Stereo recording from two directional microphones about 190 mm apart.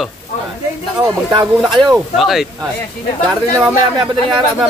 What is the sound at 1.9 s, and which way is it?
Speech, centre (ahead or behind).